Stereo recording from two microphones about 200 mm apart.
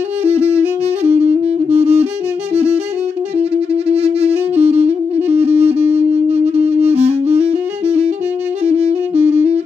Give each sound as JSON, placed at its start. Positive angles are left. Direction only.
{"t": 1.0, "sound": "saxophone", "side_deg": -30}
{"t": 1.7, "sound": "music", "side_deg": -30}
{"t": 3.3, "sound": "saxophone", "side_deg": -30}